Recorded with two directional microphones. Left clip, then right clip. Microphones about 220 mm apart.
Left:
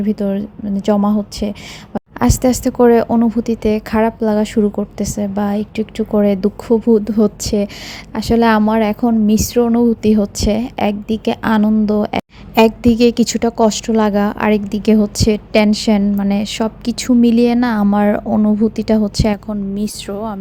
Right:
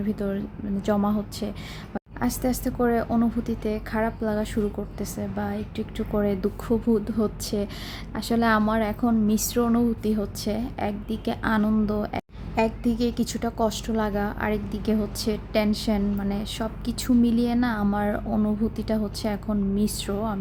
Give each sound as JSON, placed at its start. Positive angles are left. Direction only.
{"t": 0.0, "sound": "a woman's voice", "side_deg": 25}